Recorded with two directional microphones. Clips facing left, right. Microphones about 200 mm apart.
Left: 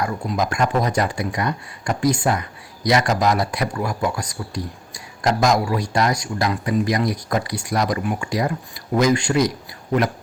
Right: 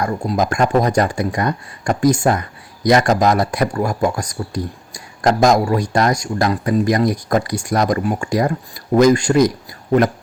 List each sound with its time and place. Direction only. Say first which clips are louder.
0.0 s speech: right 4 dB; 45° right (ahead or behind)